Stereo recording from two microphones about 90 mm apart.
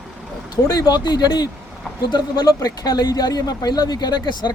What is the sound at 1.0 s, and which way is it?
Speech, 55° left (ahead or behind).